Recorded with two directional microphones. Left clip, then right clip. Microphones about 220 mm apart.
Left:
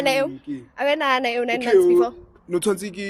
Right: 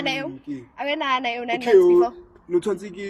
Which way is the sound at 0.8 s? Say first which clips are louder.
Left 4 dB; 50° left (ahead or behind).